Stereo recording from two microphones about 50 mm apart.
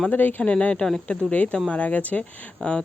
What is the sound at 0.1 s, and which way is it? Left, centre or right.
Speech, left.